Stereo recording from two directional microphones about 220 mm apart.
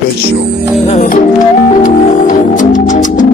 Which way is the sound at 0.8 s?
35° left (ahead or behind).